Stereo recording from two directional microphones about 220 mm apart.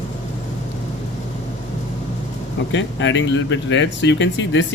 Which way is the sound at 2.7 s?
60° left (ahead or behind).